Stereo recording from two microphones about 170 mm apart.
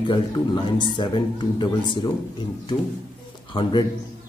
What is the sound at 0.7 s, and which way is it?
Speech, 25° left (ahead or behind).